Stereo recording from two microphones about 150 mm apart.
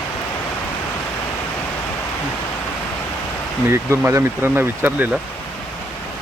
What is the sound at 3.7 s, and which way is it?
Speech, 15° right (ahead or behind).